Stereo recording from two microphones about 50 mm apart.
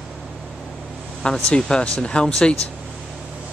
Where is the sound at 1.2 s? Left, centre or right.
Centre.